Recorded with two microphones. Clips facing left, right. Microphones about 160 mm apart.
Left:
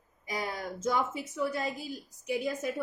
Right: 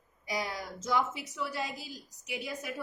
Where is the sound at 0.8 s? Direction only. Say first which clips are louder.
Left 1 dB; 50° left (ahead or behind).